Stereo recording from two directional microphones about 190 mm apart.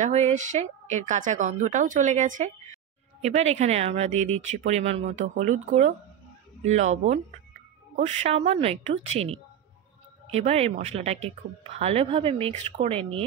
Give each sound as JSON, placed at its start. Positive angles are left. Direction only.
{"t": 0.0, "sound": "speech", "side_deg": -40}